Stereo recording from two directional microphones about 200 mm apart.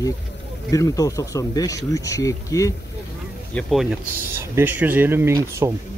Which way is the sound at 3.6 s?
Centre (ahead or behind).